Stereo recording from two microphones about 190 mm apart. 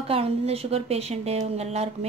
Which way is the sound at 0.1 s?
30° right (ahead or behind).